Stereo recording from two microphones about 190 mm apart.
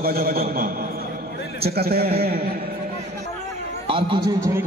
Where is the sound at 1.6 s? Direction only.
55° right (ahead or behind).